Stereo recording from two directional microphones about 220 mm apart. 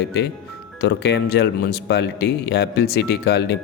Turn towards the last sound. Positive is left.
turn(degrees=50)  # may be behind; listen again after turning